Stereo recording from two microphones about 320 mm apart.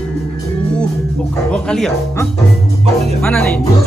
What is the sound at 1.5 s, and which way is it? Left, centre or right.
Speech, centre.